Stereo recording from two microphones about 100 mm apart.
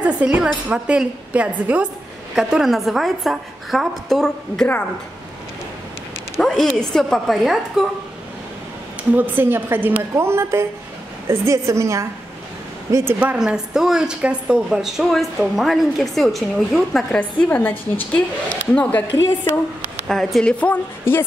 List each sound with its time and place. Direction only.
0.0 s a woman's voice: 10° right (ahead or behind)
2.3 s a woman's voice: 5° right (ahead or behind)
6.4 s a sound: 5° left (ahead or behind)
6.8 s a woman's voice: 5° left (ahead or behind)
9.1 s a woman's voice: 20° right (ahead or behind)
12.9 s a woman's voice: 20° right (ahead or behind)
13.4 s a woman's voice: 5° right (ahead or behind)
17.2 s a woman's voice: 20° left (ahead or behind)
20.1 s a woman's voice: 5° left (ahead or behind)
20.6 s a woman's voice: 20° left (ahead or behind)